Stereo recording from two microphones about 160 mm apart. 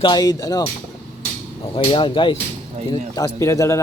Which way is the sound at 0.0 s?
25° left (ahead or behind).